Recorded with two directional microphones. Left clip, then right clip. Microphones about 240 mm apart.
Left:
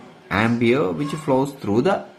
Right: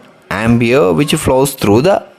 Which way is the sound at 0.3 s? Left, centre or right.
Right.